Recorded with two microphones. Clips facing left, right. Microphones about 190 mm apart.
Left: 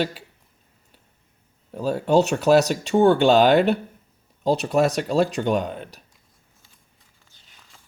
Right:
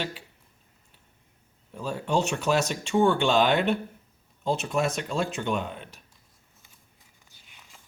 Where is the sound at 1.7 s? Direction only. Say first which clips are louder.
Left 8 dB; 40° left (ahead or behind).